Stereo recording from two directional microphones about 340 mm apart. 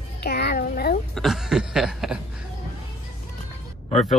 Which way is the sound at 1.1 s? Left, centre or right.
Centre.